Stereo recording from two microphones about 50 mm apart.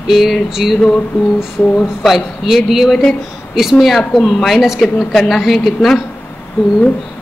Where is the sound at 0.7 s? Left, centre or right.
Centre.